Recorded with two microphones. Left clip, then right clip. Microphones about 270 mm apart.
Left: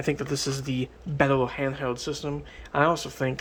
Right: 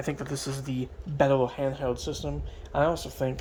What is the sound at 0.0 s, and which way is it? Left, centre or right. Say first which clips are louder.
Speech: left 5 dB; centre.